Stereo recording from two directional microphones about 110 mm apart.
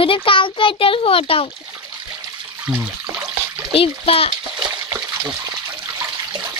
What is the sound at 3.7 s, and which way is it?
Speech, 60° left (ahead or behind).